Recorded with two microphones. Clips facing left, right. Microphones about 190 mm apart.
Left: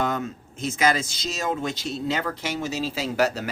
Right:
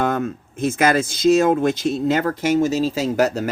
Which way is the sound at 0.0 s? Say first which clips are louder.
Right 5 dB; 55° right (ahead or behind).